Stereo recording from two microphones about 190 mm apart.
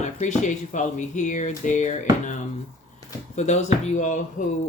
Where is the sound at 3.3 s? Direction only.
35° left (ahead or behind).